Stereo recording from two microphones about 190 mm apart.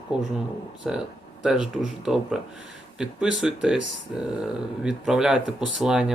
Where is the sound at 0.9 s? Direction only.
Centre (ahead or behind).